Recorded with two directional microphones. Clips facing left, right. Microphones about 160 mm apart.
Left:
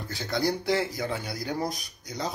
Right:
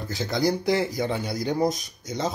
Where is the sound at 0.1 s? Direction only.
20° right (ahead or behind).